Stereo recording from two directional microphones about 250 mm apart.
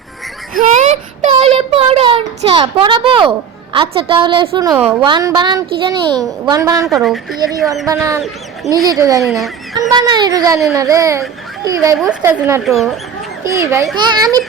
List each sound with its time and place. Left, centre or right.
0.6 s a child's voice: right
4.7 s a woman's voice: centre
4.9 s speech: centre
6.8 s a woman's voice: centre
7.9 s a woman's voice: centre
13.4 s a child's voice: centre